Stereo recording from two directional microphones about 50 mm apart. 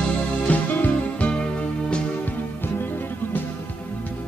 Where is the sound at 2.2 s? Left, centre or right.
Left.